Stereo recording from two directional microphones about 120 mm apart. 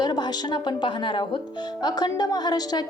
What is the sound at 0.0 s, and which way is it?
A woman's voice, 35° left (ahead or behind).